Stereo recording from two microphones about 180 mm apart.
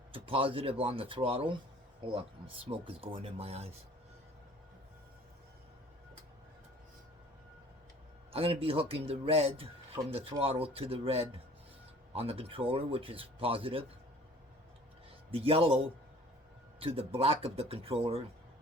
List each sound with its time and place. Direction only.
0.1 s speech: 30° right (ahead or behind)
2.6 s speech: 30° right (ahead or behind)
8.3 s speech: 30° right (ahead or behind)
15.3 s speech: 30° right (ahead or behind)